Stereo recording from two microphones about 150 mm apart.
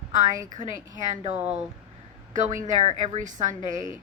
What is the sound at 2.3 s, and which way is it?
Speech, 55° right (ahead or behind).